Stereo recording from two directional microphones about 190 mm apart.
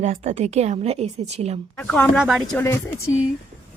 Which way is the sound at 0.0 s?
35° right (ahead or behind).